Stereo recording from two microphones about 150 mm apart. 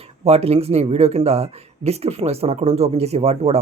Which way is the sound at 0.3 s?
45° right (ahead or behind).